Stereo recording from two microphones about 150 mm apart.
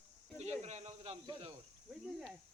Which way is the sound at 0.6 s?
50° right (ahead or behind).